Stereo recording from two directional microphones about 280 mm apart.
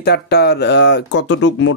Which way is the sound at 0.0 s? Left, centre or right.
Left.